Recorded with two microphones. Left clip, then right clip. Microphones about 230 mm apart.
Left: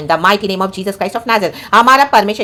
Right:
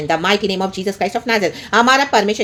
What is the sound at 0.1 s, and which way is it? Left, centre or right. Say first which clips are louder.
A woman's voice: left 5 dB; centre.